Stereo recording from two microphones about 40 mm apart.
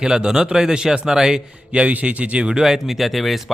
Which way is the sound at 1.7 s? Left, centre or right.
Right.